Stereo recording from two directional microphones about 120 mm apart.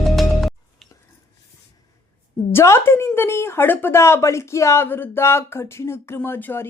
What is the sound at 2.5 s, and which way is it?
Speech, 20° left (ahead or behind).